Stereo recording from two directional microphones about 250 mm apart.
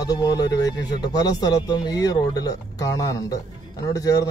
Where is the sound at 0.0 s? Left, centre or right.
Centre.